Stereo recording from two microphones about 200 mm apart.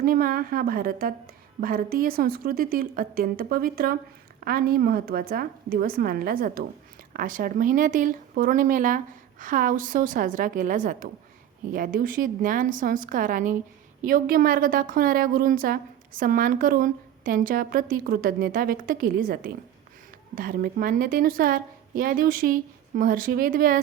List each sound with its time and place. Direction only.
0.0 s a woman's voice: 45° right (ahead or behind)